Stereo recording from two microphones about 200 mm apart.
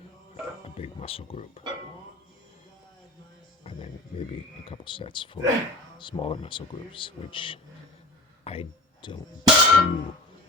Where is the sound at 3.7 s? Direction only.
30° left (ahead or behind).